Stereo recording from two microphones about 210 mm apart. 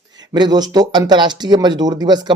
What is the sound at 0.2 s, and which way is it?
Speech, 20° right (ahead or behind).